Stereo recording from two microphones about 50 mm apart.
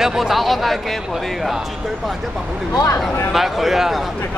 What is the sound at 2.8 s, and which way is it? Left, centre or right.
Speech, left.